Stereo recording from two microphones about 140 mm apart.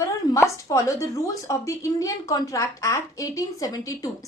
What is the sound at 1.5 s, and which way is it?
A woman's voice, 20° left (ahead or behind).